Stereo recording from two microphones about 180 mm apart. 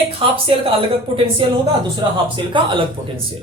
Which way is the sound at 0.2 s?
30° right (ahead or behind).